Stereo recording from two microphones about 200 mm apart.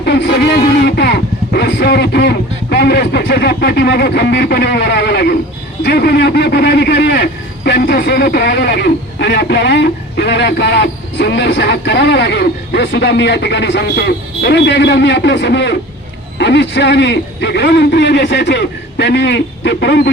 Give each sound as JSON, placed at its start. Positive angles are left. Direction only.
{"t": 0.0, "sound": "speech", "side_deg": 55}